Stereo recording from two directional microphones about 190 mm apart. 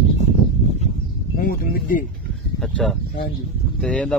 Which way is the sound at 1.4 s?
50° left (ahead or behind).